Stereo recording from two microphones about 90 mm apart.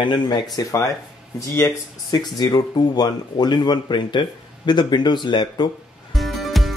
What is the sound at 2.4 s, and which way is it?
Speech, 45° left (ahead or behind).